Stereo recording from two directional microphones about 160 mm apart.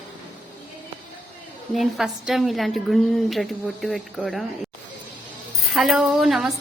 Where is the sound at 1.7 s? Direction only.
Centre (ahead or behind).